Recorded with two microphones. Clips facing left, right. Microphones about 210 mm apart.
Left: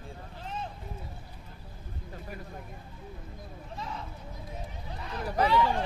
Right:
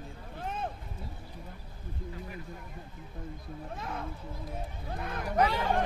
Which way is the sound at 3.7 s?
55° right (ahead or behind).